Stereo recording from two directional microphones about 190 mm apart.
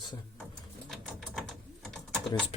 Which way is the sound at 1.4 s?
Centre (ahead or behind).